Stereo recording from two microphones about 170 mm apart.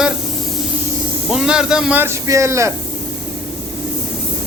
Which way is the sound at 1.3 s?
5° right (ahead or behind).